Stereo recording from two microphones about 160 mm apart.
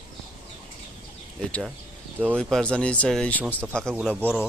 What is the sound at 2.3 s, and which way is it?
Speech, 5° left (ahead or behind).